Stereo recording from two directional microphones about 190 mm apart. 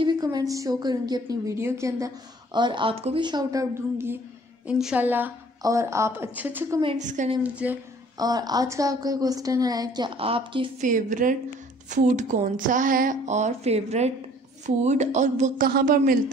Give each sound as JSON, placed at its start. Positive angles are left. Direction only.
{"t": 0.0, "sound": "a woman's voice", "side_deg": -20}
{"t": 6.8, "sound": "a woman's voice", "side_deg": -30}
{"t": 7.4, "sound": "a woman's voice", "side_deg": -5}
{"t": 8.2, "sound": "a woman's voice", "side_deg": -20}
{"t": 10.8, "sound": "a woman's voice", "side_deg": -40}